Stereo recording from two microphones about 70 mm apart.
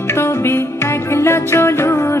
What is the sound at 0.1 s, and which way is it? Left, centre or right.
Music, left.